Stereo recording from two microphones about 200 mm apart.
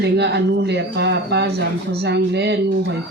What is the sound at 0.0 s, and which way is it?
Speech, 55° right (ahead or behind).